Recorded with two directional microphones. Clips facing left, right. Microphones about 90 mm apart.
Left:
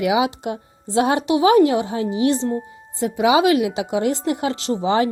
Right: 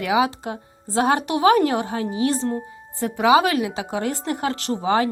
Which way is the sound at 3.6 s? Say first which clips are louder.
Left 4 dB; 40° right (ahead or behind).